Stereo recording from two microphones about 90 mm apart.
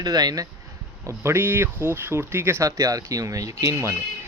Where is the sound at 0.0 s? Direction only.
45° right (ahead or behind).